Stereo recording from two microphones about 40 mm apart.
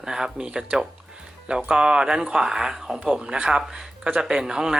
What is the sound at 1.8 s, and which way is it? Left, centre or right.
Speech, right.